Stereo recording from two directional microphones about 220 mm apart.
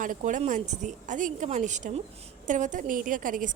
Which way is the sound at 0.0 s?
35° right (ahead or behind).